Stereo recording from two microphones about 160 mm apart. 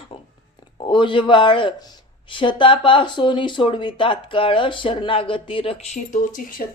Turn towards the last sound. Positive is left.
turn(degrees=55)  # may be behind; listen again after turning